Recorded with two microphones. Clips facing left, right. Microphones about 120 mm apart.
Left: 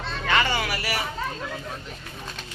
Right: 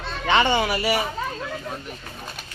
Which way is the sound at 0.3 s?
25° right (ahead or behind).